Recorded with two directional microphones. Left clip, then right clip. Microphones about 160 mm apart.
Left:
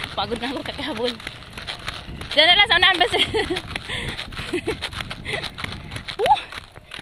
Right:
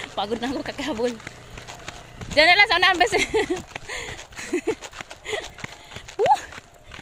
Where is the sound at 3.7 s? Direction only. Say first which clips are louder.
Left 5 dB; 75° left (ahead or behind).